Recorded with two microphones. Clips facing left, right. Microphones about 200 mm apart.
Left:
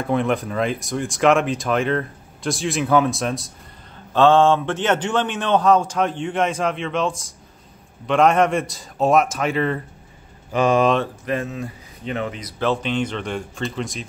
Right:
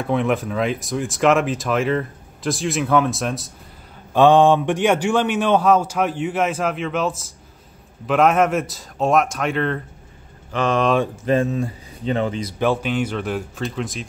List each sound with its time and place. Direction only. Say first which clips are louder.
0.0 s speech: right 1 dB; centre (ahead or behind)
4.1 s a man's voice: right 2 dB; 15° right (ahead or behind); by 10.9 s 10° left (ahead or behind)
11.2 s speech: right 6 dB; 30° right (ahead or behind)
12.5 s speech: even; 10° right (ahead or behind)